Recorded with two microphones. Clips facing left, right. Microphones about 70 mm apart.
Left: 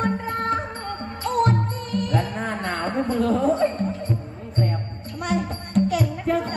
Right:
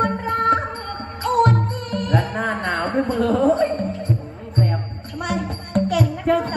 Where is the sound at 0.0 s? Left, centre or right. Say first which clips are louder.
Right 5 dB; right.